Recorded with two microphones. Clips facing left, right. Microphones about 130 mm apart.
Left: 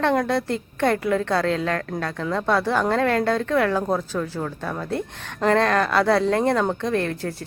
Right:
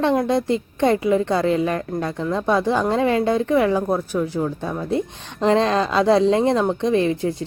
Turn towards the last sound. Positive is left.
turn(degrees=-15)  # may be behind; listen again after turning